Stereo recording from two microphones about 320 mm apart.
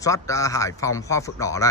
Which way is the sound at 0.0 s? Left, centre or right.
Centre.